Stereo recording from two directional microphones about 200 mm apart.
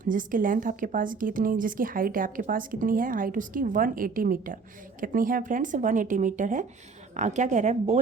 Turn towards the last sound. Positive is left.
turn(degrees=-35)  # may be behind; listen again after turning